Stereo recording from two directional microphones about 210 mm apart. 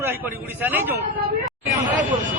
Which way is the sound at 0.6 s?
10° right (ahead or behind).